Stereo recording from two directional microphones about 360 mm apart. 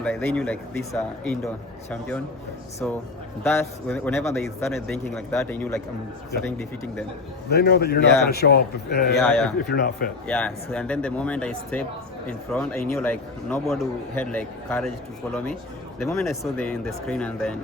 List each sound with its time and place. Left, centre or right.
0.0 s speech: centre
7.5 s a man's voice: left
9.1 s speech: centre
9.6 s a man's voice: left
10.2 s speech: centre
16.0 s speech: centre